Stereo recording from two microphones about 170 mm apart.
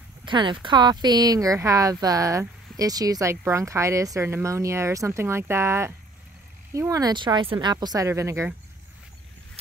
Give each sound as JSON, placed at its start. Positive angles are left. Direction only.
{"t": 0.2, "sound": "speech", "side_deg": -30}